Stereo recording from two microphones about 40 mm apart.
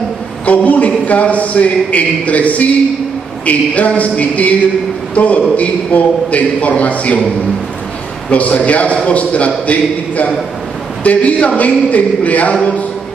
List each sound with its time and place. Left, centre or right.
0.5 s a man's voice: left
8.3 s a man's voice: left